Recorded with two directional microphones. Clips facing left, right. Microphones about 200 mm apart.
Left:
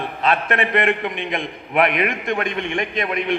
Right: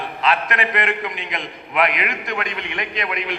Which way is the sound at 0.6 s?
55° left (ahead or behind).